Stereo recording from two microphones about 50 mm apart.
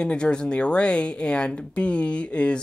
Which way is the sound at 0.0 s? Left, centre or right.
Centre.